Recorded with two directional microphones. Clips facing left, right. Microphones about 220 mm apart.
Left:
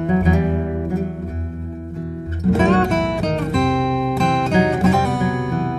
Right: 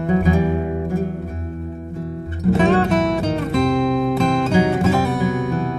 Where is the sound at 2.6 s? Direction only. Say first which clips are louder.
Right 1 dB; centre (ahead or behind).